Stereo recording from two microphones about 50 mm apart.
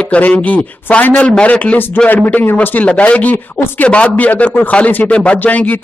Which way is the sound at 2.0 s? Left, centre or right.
Left.